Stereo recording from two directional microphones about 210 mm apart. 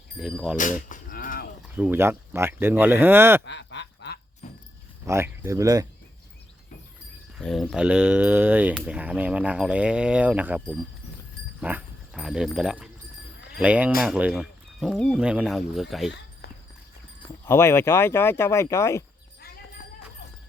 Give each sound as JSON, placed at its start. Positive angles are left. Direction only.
{"t": 0.2, "sound": "speech", "side_deg": 0}
{"t": 0.5, "sound": "sheep", "side_deg": 40}
{"t": 1.6, "sound": "speech", "side_deg": -5}
{"t": 3.4, "sound": "a sound", "side_deg": 55}
{"t": 4.4, "sound": "a sound", "side_deg": 35}
{"t": 5.0, "sound": "speech", "side_deg": -10}
{"t": 7.3, "sound": "speech", "side_deg": 0}
{"t": 11.6, "sound": "speech", "side_deg": -5}
{"t": 17.4, "sound": "speech", "side_deg": 10}